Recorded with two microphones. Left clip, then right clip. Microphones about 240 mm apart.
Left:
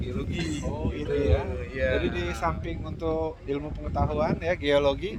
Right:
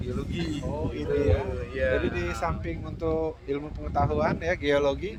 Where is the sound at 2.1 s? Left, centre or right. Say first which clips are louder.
Left 1 dB; centre.